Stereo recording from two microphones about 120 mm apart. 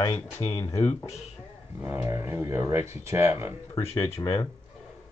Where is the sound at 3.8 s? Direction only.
50° left (ahead or behind).